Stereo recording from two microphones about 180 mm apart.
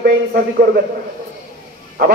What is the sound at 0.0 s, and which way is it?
Speech, 55° right (ahead or behind).